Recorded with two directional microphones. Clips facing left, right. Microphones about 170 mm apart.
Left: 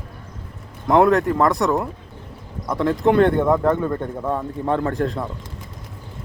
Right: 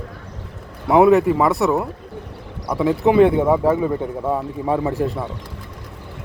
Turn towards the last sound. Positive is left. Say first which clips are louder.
# right 1 dB
turn(degrees=-5)  # may be behind; listen again after turning